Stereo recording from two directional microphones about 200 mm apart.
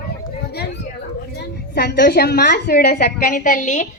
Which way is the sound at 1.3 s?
55° left (ahead or behind).